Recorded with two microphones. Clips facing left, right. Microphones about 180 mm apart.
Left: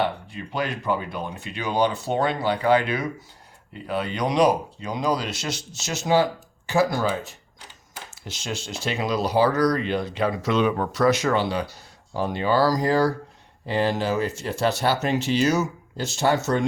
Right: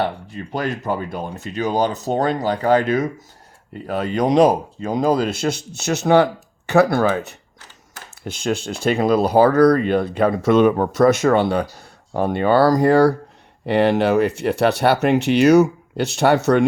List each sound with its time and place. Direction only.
0.0 s speech: 40° right (ahead or behind); by 7.3 s 65° right (ahead or behind)
8.2 s speech: 55° right (ahead or behind)